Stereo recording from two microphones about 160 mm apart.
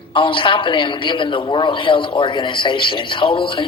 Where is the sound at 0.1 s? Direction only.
30° left (ahead or behind).